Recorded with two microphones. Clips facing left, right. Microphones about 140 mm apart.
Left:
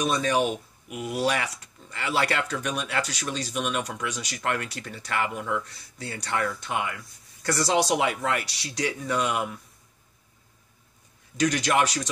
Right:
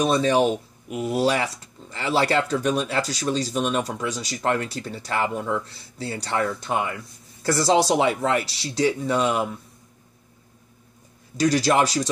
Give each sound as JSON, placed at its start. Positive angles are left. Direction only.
{"t": 0.0, "sound": "speech", "side_deg": -30}
{"t": 11.3, "sound": "speech", "side_deg": -35}